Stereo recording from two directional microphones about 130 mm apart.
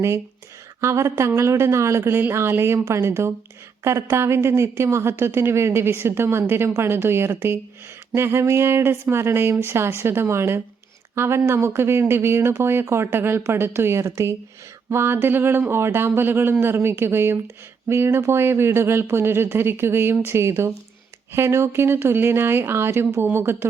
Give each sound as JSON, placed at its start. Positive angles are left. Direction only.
{"t": 0.8, "sound": "a woman's voice", "side_deg": -20}